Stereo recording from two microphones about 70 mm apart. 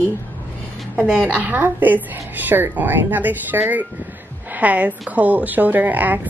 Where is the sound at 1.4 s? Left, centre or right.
Right.